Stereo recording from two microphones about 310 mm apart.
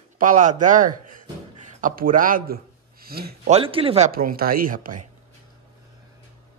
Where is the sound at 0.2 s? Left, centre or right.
Right.